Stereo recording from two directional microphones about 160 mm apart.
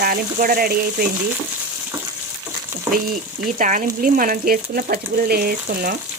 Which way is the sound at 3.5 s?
55° right (ahead or behind).